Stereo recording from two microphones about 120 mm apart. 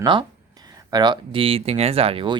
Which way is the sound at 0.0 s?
40° right (ahead or behind).